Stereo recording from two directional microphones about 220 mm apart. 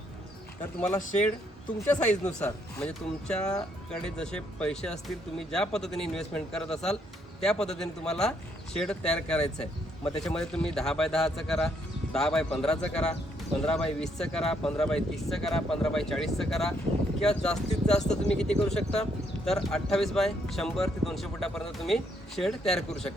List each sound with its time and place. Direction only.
1.9 s speech: 5° left (ahead or behind)